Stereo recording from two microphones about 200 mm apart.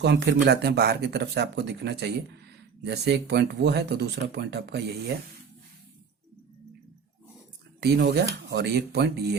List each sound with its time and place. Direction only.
0.0 s speech: 55° right (ahead or behind)
7.8 s speech: 55° right (ahead or behind)